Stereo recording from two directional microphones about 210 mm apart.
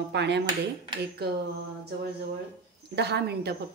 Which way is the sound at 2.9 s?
50° right (ahead or behind).